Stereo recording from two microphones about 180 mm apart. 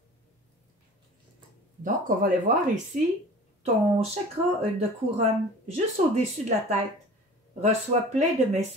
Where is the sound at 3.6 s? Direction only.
35° right (ahead or behind).